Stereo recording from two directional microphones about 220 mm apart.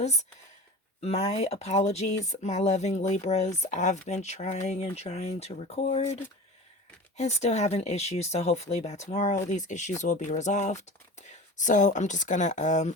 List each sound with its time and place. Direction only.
1.0 s speech: 30° left (ahead or behind)
7.2 s speech: 30° left (ahead or behind)